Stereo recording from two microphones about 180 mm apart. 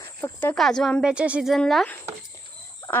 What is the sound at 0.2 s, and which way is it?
A woman's voice, 10° left (ahead or behind).